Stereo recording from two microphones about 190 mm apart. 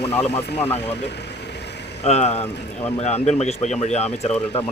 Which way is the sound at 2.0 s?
35° left (ahead or behind).